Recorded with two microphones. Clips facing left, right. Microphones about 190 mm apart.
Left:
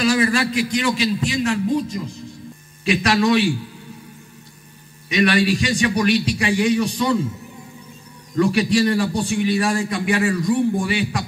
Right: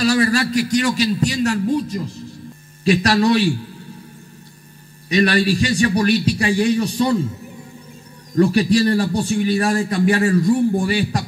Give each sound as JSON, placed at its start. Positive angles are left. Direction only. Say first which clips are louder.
{"t": 0.0, "sound": "a man's voice", "louder": "right 1 dB", "side_deg": -40}
{"t": 5.1, "sound": "a man's voice", "louder": "right 1 dB", "side_deg": -40}
{"t": 8.4, "sound": "a man's voice", "louder": "right 2 dB", "side_deg": -40}